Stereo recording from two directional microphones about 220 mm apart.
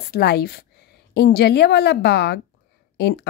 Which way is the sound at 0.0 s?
45° left (ahead or behind).